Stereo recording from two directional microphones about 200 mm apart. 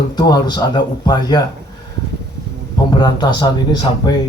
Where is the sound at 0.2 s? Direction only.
20° left (ahead or behind).